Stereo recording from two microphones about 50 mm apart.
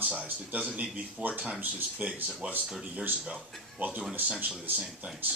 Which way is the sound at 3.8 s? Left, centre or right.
Right.